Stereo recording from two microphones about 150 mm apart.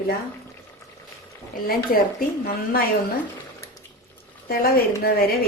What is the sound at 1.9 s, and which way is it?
Speech, 70° left (ahead or behind).